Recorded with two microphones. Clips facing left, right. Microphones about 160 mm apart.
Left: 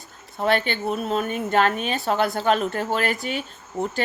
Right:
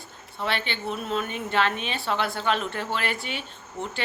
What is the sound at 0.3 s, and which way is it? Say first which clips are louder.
A woman's voice: left 7 dB; 45° left (ahead or behind).